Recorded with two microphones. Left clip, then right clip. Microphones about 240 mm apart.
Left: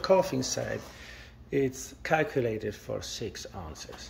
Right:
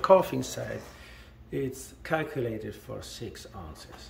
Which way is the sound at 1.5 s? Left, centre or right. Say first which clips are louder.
Left 5 dB; centre.